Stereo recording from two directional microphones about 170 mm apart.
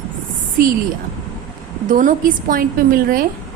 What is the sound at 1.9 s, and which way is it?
A woman's voice, 55° right (ahead or behind).